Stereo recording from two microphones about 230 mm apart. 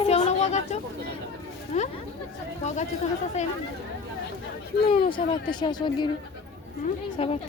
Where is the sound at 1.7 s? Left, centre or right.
Left.